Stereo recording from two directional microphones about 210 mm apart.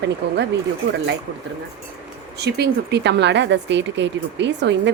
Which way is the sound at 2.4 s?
50° right (ahead or behind).